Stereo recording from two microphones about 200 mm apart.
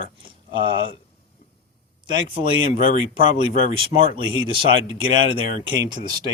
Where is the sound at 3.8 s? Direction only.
25° right (ahead or behind).